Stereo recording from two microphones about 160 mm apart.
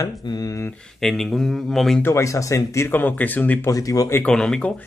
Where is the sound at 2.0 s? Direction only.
15° left (ahead or behind).